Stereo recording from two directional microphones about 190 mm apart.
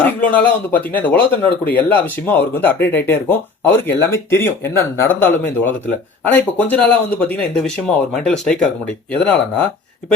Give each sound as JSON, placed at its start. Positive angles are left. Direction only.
{"t": 0.0, "sound": "a man's voice", "side_deg": 5}